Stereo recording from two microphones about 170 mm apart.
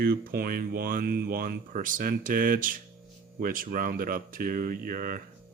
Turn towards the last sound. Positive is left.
turn(degrees=-55)  # may be behind; listen again after turning